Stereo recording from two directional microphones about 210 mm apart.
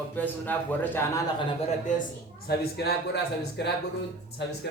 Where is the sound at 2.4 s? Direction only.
50° left (ahead or behind).